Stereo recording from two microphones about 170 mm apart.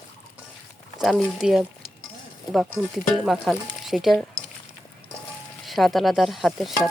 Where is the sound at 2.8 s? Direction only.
Centre (ahead or behind).